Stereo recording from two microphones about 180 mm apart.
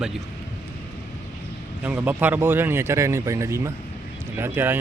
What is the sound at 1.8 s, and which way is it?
Speech, 10° right (ahead or behind).